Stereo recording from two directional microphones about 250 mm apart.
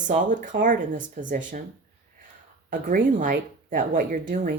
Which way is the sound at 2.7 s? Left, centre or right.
Right.